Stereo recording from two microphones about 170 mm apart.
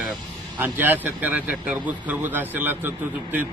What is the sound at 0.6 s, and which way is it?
A man's voice, 10° right (ahead or behind).